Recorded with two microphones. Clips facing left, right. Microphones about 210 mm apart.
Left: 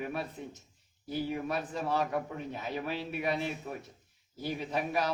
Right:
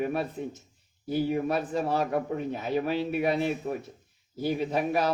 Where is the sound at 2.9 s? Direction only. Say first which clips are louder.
Right 5 dB; 55° right (ahead or behind).